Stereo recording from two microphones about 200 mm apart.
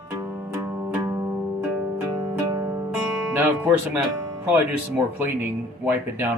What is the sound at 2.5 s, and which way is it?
Music, 15° right (ahead or behind).